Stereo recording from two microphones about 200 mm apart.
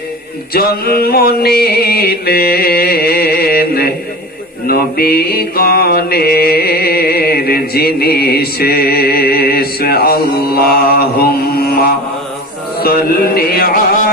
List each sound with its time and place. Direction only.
0.5 s music: 50° left (ahead or behind)
4.6 s mantra: 50° left (ahead or behind)
12.8 s music: 50° left (ahead or behind)